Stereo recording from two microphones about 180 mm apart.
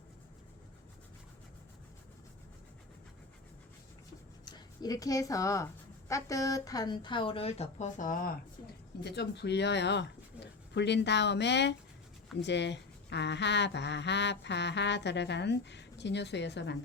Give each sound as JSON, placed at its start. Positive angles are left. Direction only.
{"t": 4.4, "sound": "a woman's voice", "side_deg": 20}
{"t": 9.0, "sound": "speech", "side_deg": 70}